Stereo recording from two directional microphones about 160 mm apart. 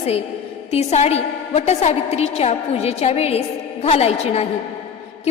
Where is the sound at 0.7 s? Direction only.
40° left (ahead or behind).